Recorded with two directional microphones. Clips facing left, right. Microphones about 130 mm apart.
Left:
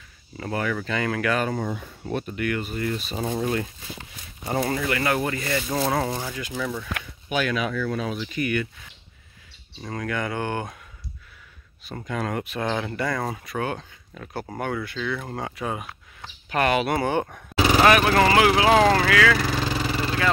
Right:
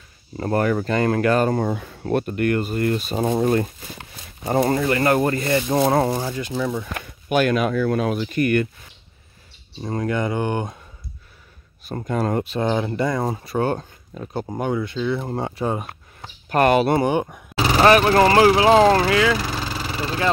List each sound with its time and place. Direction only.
0.4 s speech: 45° right (ahead or behind)
1.5 s speech: 60° right (ahead or behind); by 6.0 s 30° right (ahead or behind)
6.0 s speech: 20° right (ahead or behind)
6.3 s speech: 30° right (ahead or behind)
7.0 s speech: 50° right (ahead or behind)
9.8 s speech: 25° right (ahead or behind)
11.8 s speech: 45° right (ahead or behind)
14.2 s speech: 20° right (ahead or behind)
16.4 s speech: 45° right (ahead or behind)
17.0 s speech: 15° right (ahead or behind)
17.8 s speech: 35° right (ahead or behind)